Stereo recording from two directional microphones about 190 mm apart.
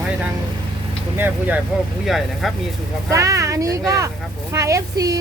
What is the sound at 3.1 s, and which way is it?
Speech, 15° right (ahead or behind).